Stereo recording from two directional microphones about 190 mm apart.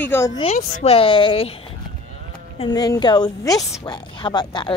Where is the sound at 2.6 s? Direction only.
20° left (ahead or behind).